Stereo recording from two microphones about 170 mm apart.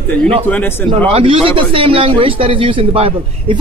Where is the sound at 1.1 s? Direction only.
35° right (ahead or behind).